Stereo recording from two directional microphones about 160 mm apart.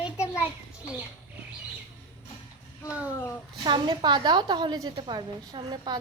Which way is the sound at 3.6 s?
30° right (ahead or behind).